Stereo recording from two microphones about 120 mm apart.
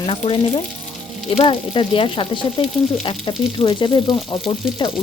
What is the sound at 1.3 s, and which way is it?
Speech, 50° left (ahead or behind).